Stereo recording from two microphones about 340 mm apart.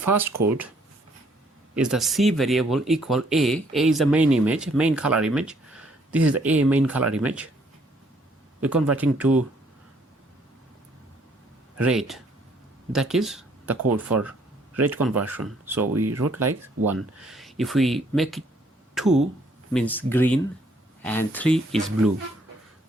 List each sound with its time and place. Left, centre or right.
0.0 s speech: centre
1.7 s speech: centre
8.6 s speech: centre
11.8 s speech: centre
14.8 s speech: centre
15.9 s speech: right
16.3 s speech: centre